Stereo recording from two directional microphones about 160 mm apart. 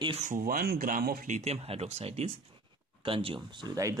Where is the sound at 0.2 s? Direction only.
60° right (ahead or behind).